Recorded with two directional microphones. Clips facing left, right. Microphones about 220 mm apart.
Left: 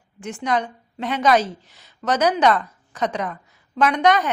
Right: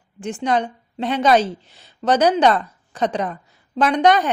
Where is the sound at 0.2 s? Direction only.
30° right (ahead or behind).